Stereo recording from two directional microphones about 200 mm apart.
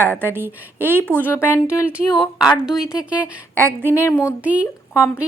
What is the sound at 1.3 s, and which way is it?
Speech, 10° left (ahead or behind).